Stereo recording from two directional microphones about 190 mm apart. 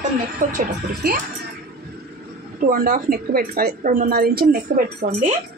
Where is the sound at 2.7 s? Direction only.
50° right (ahead or behind).